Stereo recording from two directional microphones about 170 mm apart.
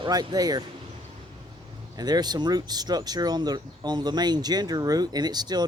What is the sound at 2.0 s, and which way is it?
Speech, 25° right (ahead or behind).